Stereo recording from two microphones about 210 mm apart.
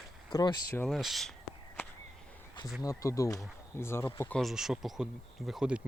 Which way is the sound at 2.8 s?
15° left (ahead or behind).